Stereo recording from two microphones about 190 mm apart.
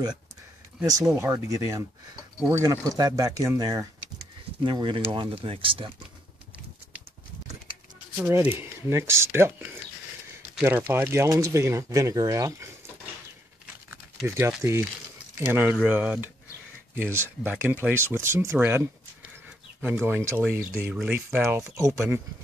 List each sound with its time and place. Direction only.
1.0 s speech: 15° right (ahead or behind)
8.2 s speech: 10° right (ahead or behind)
14.2 s speech: 15° right (ahead or behind)